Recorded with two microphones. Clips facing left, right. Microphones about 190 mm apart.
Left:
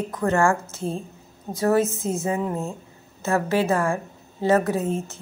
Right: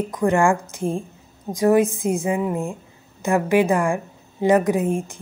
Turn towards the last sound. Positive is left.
turn(degrees=-15)  # may be behind; listen again after turning